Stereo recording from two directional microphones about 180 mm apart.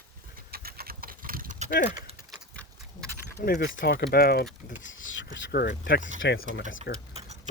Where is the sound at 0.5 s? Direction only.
55° right (ahead or behind).